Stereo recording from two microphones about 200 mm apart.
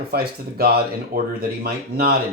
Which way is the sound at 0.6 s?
50° right (ahead or behind).